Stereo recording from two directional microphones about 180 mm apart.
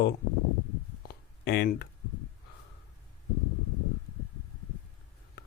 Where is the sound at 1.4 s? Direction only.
60° left (ahead or behind).